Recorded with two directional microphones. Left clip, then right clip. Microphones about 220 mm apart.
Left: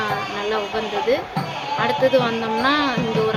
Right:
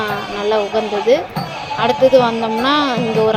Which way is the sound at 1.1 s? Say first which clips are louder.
Right 6 dB; 20° right (ahead or behind).